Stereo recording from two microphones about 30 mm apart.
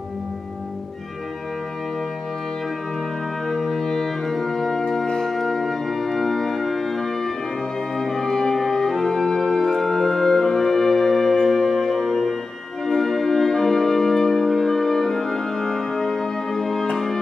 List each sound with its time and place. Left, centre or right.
3.4 s music: centre